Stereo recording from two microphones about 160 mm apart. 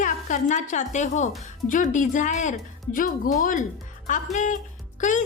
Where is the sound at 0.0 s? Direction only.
50° left (ahead or behind).